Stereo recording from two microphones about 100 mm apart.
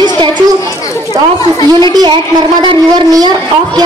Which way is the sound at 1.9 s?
45° right (ahead or behind).